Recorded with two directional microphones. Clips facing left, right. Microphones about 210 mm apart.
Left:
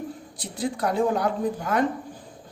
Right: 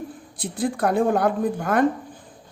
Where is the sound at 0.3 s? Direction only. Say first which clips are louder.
Right 4 dB; 55° right (ahead or behind).